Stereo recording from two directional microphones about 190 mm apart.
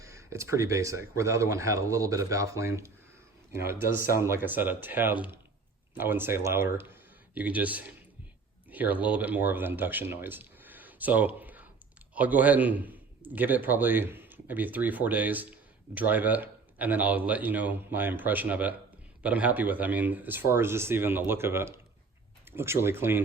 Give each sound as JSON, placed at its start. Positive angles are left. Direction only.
{"t": 0.0, "sound": "a man's voice", "side_deg": -15}
{"t": 3.9, "sound": "a man's voice", "side_deg": -15}